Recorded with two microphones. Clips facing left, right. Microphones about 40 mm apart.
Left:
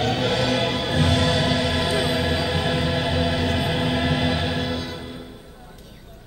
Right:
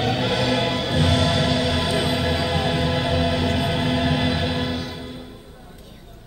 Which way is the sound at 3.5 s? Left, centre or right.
Centre.